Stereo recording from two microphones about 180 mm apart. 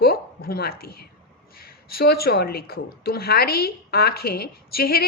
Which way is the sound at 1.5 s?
55° left (ahead or behind).